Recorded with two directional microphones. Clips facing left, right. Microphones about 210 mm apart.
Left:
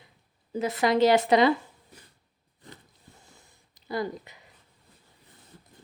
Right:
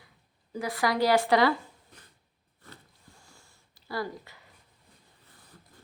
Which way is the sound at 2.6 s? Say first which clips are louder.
Left 3 dB; 15° left (ahead or behind).